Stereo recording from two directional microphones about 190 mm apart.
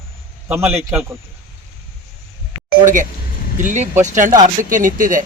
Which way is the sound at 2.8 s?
45° right (ahead or behind).